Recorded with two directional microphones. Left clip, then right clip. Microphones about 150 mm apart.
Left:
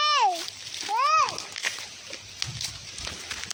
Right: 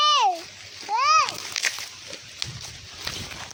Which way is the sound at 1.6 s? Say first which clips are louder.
Right 5 dB; 35° right (ahead or behind).